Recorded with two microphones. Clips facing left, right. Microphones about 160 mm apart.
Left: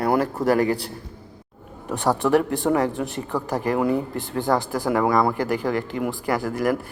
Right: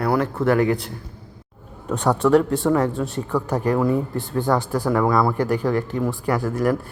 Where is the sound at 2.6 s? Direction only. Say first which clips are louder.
Right 1 dB; 15° left (ahead or behind).